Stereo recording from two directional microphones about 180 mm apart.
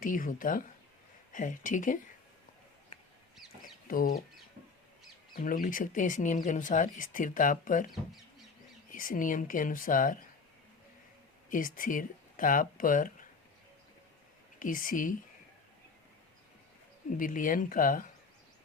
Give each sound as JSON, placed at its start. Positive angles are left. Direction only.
{"t": 0.0, "sound": "speech", "side_deg": 50}
{"t": 3.8, "sound": "speech", "side_deg": 50}
{"t": 5.3, "sound": "speech", "side_deg": 50}
{"t": 8.9, "sound": "speech", "side_deg": 50}
{"t": 11.4, "sound": "speech", "side_deg": 50}
{"t": 14.6, "sound": "speech", "side_deg": 50}
{"t": 17.2, "sound": "speech", "side_deg": 45}